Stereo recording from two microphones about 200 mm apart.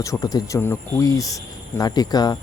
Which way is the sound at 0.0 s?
15° left (ahead or behind).